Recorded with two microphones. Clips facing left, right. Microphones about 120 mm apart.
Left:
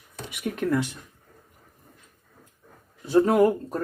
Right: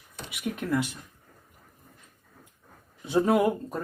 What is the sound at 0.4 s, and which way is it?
Speech, centre (ahead or behind).